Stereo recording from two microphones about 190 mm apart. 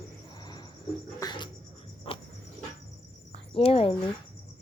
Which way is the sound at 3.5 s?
30° left (ahead or behind).